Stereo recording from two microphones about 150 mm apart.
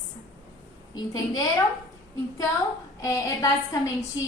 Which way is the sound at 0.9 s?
25° left (ahead or behind).